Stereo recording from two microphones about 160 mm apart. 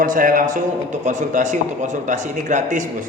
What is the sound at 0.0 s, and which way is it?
A man's voice, 60° right (ahead or behind).